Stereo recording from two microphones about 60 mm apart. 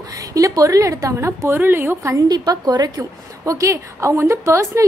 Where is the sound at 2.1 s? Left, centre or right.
Right.